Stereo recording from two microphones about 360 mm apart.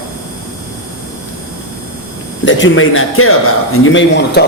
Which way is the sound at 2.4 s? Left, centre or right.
Left.